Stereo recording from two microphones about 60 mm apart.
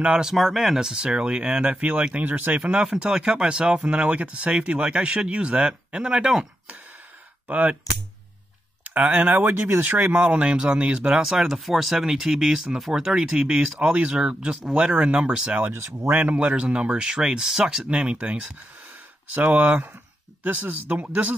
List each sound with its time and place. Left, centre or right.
0.0 s speech: centre
0.3 s speech: centre; by 2.6 s right
2.6 s speech: centre
8.8 s speech: right
15.7 s speech: right
16.1 s speech: right
16.3 s speech: centre
17.9 s speech: right